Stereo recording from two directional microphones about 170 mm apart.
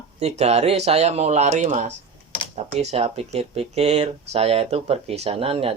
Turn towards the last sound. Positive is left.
turn(degrees=-35)  # may be behind; listen again after turning